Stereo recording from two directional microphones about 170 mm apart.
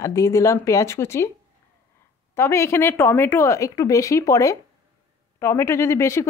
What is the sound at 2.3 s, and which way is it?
Speech, 15° left (ahead or behind).